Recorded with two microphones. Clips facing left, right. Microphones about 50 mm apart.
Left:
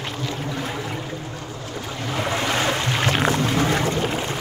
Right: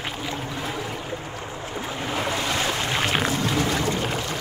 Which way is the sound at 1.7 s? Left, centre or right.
Centre.